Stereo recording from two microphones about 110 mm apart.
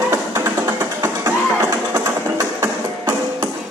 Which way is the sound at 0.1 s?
25° right (ahead or behind).